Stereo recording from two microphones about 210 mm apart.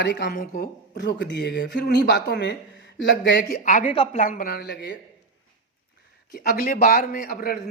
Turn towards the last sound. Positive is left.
turn(degrees=45)  # may be behind; listen again after turning